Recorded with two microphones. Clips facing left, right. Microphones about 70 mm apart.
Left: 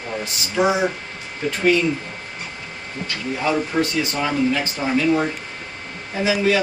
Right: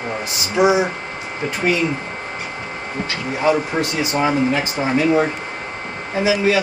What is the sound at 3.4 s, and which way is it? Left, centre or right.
Speech, centre.